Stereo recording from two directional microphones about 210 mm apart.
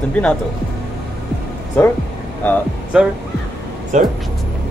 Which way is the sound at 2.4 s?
10° left (ahead or behind).